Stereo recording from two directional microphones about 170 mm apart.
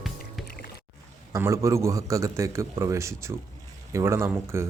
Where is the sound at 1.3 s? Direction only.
20° right (ahead or behind).